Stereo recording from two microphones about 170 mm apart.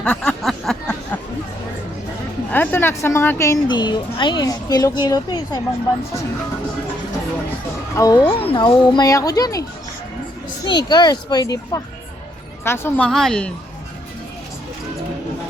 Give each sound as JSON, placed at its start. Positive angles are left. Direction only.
{"t": 0.0, "sound": "a sound", "side_deg": 5}
{"t": 2.5, "sound": "a woman's voice", "side_deg": 10}
{"t": 7.9, "sound": "a woman's voice", "side_deg": 20}
{"t": 8.3, "sound": "a woman's voice", "side_deg": 35}
{"t": 10.7, "sound": "a woman's voice", "side_deg": 25}
{"t": 13.1, "sound": "a woman's voice", "side_deg": 5}